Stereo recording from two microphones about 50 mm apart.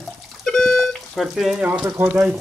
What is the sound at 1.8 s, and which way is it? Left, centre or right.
Speech, right.